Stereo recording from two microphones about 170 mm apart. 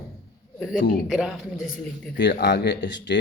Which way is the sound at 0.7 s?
50° left (ahead or behind).